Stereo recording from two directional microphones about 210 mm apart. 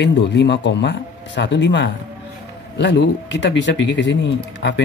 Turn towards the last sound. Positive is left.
turn(degrees=60)  # may be behind; listen again after turning